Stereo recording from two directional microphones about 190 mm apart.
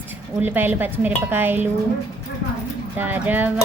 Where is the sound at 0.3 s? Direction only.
10° right (ahead or behind).